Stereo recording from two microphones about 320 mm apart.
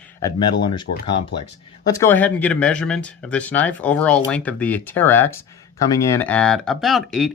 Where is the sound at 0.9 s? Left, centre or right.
Left.